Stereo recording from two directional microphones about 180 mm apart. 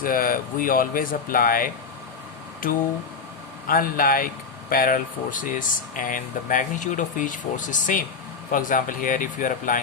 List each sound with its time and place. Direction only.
0.0 s speech: 50° left (ahead or behind)
3.7 s speech: 50° left (ahead or behind)